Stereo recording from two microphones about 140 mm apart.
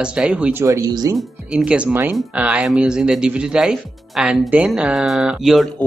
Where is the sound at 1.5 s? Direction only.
10° right (ahead or behind).